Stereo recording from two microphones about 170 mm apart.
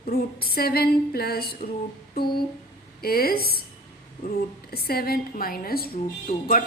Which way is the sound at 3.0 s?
60° left (ahead or behind).